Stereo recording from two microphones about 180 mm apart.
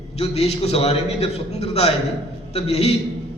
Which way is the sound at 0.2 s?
35° left (ahead or behind).